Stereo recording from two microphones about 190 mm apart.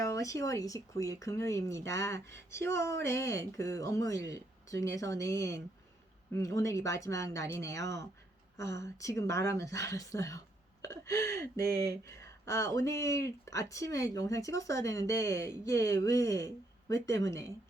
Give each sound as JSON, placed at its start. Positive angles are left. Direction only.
{"t": 0.0, "sound": "speech", "side_deg": 15}